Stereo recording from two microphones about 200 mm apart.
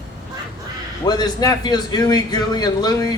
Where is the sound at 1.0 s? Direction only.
20° left (ahead or behind).